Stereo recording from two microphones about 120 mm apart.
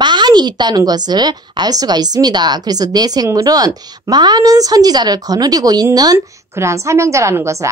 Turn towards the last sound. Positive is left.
turn(degrees=-25)  # may be behind; listen again after turning